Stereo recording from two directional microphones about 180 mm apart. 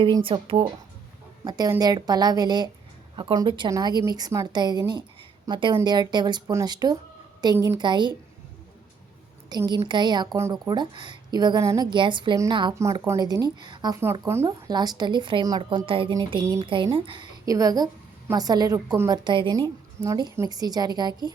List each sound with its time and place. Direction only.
0.0 s a woman's voice: 30° right (ahead or behind)
9.5 s a woman's voice: 20° right (ahead or behind)